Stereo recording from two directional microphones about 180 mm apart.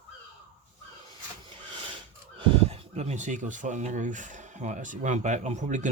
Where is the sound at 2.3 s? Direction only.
35° right (ahead or behind).